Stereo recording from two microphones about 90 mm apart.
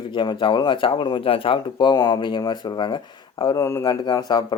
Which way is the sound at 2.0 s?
50° left (ahead or behind).